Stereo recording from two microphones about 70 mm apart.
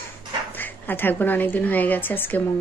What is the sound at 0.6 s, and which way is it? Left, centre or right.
Speech, left.